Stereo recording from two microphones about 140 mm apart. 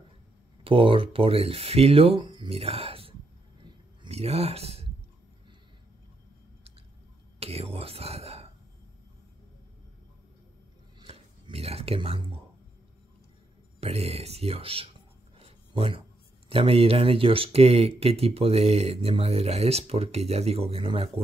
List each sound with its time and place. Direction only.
0.7 s speech: 40° right (ahead or behind)
7.3 s speech: 45° right (ahead or behind)
11.0 s a sound: 40° right (ahead or behind)
13.7 s speech: 45° right (ahead or behind)
15.3 s writing: 45° right (ahead or behind)
16.4 s speech: 40° right (ahead or behind)